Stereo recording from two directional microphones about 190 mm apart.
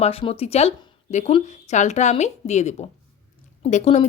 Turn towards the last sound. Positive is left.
turn(degrees=35)  # may be behind; listen again after turning